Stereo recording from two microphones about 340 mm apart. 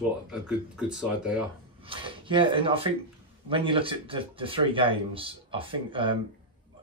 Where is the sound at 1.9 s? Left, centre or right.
Centre.